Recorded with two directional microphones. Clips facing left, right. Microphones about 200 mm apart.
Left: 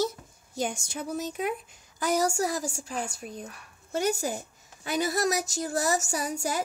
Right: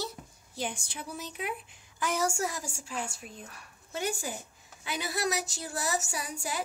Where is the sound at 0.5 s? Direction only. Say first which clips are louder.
Left 5 dB; 45° left (ahead or behind).